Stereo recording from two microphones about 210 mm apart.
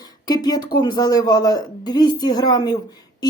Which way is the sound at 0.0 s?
20° left (ahead or behind).